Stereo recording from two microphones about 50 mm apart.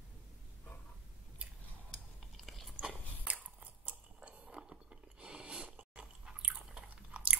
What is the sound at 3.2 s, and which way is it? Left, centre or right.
Chewing, right.